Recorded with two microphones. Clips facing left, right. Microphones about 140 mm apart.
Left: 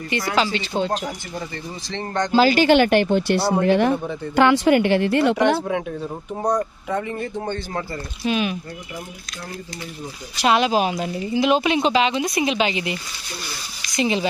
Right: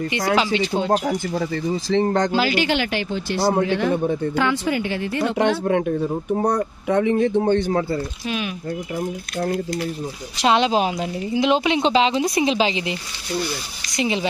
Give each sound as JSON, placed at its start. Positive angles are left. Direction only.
{"t": 0.4, "sound": "speech", "side_deg": -15}
{"t": 2.3, "sound": "speech", "side_deg": 40}
{"t": 5.7, "sound": "speech", "side_deg": -55}
{"t": 6.9, "sound": "speech", "side_deg": -70}
{"t": 8.3, "sound": "speech", "side_deg": 0}
{"t": 10.3, "sound": "speech", "side_deg": -25}
{"t": 13.9, "sound": "speech", "side_deg": -15}